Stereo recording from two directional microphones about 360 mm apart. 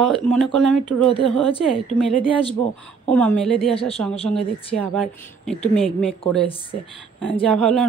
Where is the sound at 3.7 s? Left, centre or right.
Centre.